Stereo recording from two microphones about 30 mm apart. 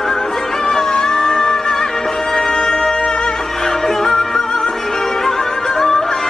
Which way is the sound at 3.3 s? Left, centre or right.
Centre.